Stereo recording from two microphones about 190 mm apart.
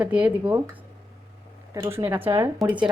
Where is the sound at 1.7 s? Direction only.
15° right (ahead or behind).